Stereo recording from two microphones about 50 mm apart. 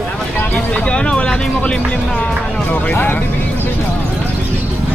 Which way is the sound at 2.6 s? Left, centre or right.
Left.